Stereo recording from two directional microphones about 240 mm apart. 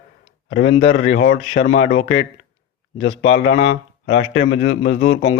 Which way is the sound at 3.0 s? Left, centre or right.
Left.